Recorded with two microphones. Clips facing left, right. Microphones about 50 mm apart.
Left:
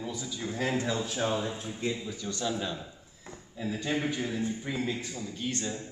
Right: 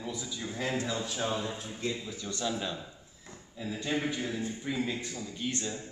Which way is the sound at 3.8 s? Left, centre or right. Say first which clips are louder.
Even; centre.